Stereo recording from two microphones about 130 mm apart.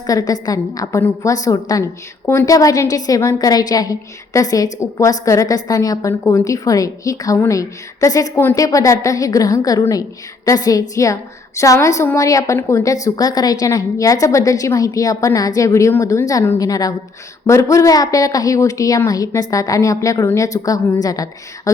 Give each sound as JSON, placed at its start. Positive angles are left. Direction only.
{"t": 0.1, "sound": "a woman's voice", "side_deg": 30}